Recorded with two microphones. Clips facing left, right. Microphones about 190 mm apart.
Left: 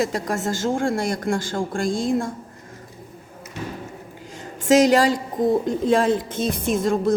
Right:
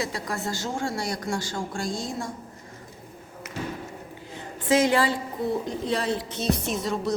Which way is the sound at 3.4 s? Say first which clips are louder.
Right 1 dB; 90° right.